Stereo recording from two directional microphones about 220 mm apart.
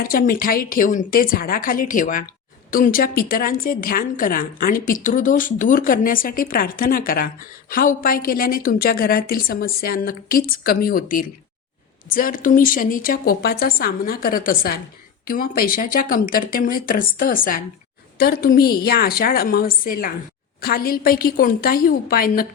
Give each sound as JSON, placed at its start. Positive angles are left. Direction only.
{"t": 0.0, "sound": "a woman's voice", "side_deg": 40}